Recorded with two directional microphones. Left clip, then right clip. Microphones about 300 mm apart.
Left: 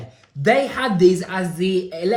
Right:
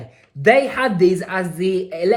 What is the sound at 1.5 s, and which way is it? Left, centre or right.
Speech, right.